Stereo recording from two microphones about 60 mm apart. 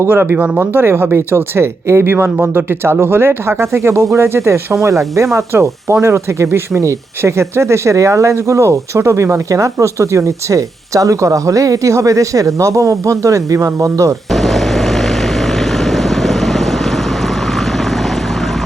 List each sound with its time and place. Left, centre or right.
0.0 s speech: right
0.3 s speech: right
0.6 s speech: right
14.3 s vehicle: centre